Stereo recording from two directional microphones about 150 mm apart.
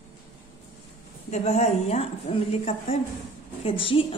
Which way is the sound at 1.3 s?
50° left (ahead or behind).